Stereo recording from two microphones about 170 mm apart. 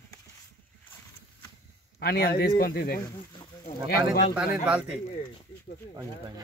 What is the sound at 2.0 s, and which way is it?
Speech, 65° left (ahead or behind).